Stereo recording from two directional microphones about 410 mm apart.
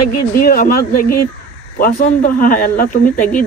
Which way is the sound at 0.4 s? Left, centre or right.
Left.